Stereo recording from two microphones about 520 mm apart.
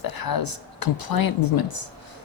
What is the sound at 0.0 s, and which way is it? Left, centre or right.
Speech, left.